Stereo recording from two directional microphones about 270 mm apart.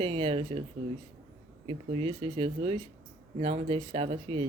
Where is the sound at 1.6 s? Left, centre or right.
Right.